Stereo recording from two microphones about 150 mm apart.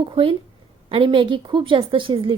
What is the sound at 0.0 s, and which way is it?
A woman's voice, 35° right (ahead or behind).